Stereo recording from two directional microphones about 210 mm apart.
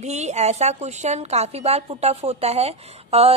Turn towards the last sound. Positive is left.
turn(degrees=-30)  # may be behind; listen again after turning